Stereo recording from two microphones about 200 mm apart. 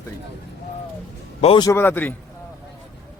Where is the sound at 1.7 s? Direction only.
10° left (ahead or behind).